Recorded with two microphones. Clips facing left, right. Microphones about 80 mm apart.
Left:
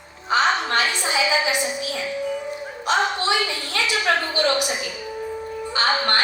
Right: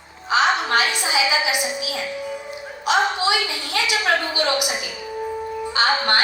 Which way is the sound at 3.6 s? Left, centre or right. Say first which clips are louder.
Right 1 dB; centre.